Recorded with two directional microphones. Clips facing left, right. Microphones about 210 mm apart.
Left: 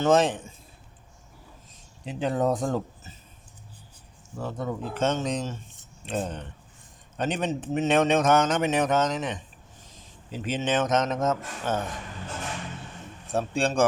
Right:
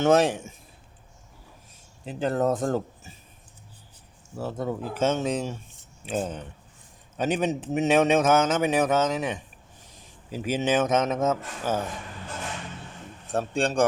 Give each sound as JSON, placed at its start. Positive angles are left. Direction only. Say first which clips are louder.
{"t": 0.0, "sound": "speech", "louder": "right 1 dB", "side_deg": -10}
{"t": 2.0, "sound": "speech", "louder": "right 1 dB", "side_deg": 0}
{"t": 4.4, "sound": "speech", "louder": "right 2 dB", "side_deg": -5}
{"t": 13.2, "sound": "speech", "louder": "even", "side_deg": 0}